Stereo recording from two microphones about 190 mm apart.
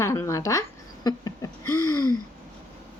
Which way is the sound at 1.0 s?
20° left (ahead or behind).